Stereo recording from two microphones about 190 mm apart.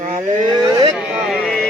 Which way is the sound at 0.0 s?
45° right (ahead or behind).